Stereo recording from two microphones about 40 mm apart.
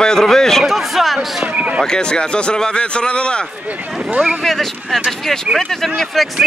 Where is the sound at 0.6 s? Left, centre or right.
Centre.